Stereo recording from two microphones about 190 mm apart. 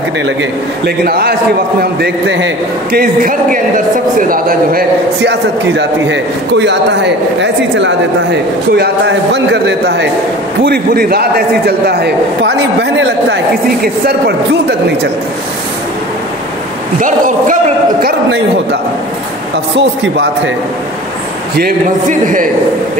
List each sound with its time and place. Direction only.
0.4 s a man's voice: 55° right (ahead or behind)
10.6 s a man's voice: 55° right (ahead or behind)
14.0 s a man's voice: 60° right (ahead or behind)
18.0 s a man's voice: 65° right (ahead or behind)
19.8 s a man's voice: 65° right (ahead or behind)
22.2 s a man's voice: 45° right (ahead or behind)